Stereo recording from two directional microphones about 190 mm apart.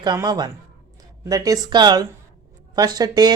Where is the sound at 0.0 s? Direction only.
20° right (ahead or behind).